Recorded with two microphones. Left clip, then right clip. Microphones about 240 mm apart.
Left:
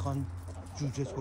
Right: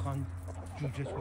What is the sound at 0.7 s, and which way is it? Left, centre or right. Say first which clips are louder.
Speech: left 3 dB; centre.